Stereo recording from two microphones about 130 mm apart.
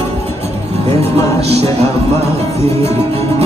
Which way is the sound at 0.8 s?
55° right (ahead or behind).